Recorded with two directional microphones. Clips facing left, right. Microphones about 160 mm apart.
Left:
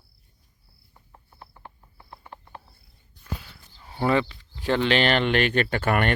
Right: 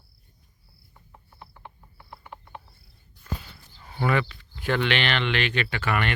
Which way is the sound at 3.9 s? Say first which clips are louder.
Left 3 dB; 25° left (ahead or behind).